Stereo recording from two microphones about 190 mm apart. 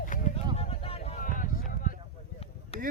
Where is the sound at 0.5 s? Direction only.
30° left (ahead or behind).